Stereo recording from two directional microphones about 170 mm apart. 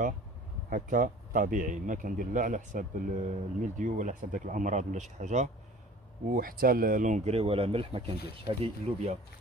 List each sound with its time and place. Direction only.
0.7 s speech: 50° right (ahead or behind)
6.3 s speech: 60° right (ahead or behind); by 9.2 s 40° right (ahead or behind)